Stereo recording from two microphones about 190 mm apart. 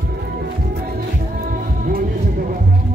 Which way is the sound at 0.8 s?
50° right (ahead or behind).